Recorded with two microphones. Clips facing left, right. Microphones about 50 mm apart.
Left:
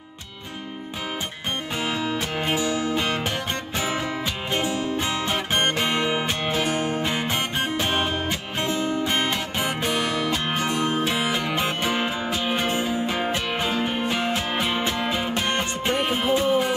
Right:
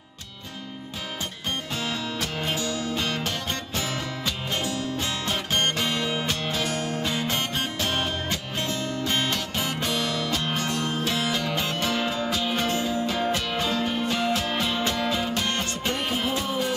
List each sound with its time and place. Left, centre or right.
1.8 s music: left